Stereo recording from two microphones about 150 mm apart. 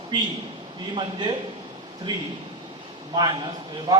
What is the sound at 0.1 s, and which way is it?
A man's voice, 30° right (ahead or behind).